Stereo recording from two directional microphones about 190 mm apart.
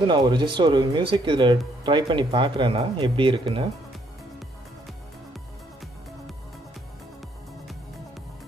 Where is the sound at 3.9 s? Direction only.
Centre (ahead or behind).